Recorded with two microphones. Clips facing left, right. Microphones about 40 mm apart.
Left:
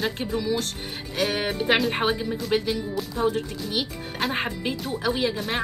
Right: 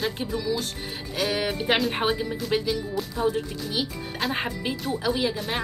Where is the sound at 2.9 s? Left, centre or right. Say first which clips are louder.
Left 1 dB; centre.